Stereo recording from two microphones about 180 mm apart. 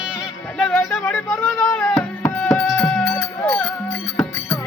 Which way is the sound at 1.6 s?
15° left (ahead or behind).